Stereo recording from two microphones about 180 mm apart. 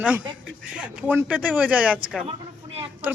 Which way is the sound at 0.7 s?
5° right (ahead or behind).